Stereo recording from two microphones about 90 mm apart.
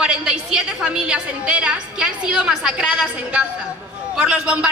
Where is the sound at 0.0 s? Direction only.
10° right (ahead or behind).